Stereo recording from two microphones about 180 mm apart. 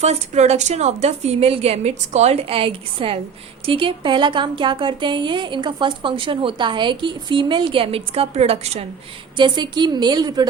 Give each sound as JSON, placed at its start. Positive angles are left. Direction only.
{"t": 0.0, "sound": "a woman's voice", "side_deg": -35}